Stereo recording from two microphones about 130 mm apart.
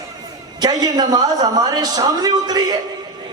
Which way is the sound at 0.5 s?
30° right (ahead or behind).